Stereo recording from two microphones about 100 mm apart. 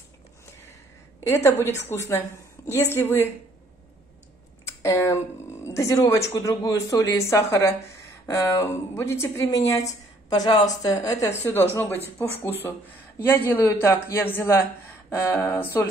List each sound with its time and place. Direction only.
1.2 s a woman's voice: 25° left (ahead or behind)
4.8 s a woman's voice: 30° left (ahead or behind)
11.4 s a woman's voice: 20° left (ahead or behind)